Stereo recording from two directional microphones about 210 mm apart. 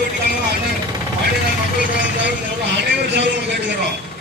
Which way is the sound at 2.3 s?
55° right (ahead or behind).